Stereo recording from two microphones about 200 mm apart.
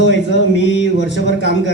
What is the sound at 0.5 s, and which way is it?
Mantra, 65° left (ahead or behind).